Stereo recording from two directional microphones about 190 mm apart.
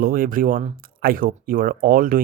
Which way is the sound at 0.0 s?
50° right (ahead or behind).